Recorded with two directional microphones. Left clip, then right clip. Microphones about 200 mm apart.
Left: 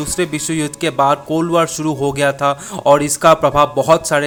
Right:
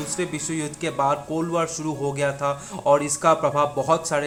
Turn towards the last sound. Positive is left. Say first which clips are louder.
# left 9 dB
turn(degrees=35)  # may be behind; listen again after turning